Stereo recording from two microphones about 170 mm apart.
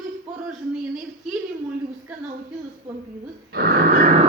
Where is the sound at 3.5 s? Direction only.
65° right (ahead or behind).